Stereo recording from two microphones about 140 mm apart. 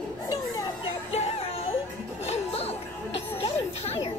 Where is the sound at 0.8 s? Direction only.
45° left (ahead or behind).